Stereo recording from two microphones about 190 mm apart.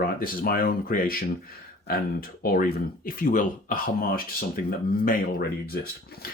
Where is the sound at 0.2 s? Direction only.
50° left (ahead or behind).